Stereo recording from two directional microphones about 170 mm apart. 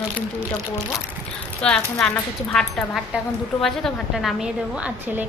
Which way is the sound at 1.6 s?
5° left (ahead or behind).